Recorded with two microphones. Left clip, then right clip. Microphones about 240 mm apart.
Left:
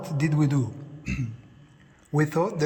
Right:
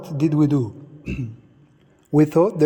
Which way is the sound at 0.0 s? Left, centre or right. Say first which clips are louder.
Right 7 dB; right.